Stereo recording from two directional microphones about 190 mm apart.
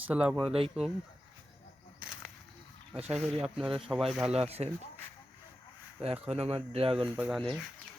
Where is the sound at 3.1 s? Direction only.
Centre (ahead or behind).